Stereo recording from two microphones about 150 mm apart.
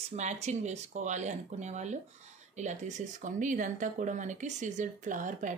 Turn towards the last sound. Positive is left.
turn(degrees=-60)  # may be behind; listen again after turning